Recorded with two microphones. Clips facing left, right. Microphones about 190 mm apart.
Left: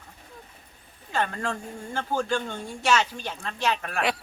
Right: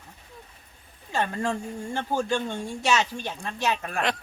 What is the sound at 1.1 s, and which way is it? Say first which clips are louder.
Speech: right 1 dB; 10° right (ahead or behind).